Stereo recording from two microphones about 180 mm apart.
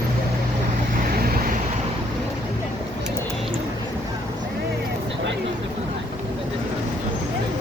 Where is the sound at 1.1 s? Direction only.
55° right (ahead or behind).